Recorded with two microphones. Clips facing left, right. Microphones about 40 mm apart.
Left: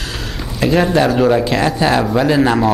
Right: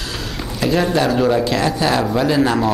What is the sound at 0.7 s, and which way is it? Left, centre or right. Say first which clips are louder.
Speech: left 3 dB; centre.